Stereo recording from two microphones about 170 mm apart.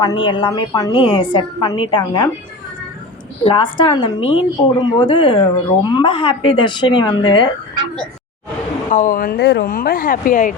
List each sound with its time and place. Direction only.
0.0 s a woman's voice: 30° left (ahead or behind)
3.4 s a woman's voice: 30° left (ahead or behind)
8.9 s speech: 50° left (ahead or behind)